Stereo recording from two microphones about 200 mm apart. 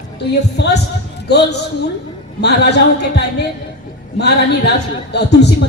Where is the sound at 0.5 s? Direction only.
55° left (ahead or behind).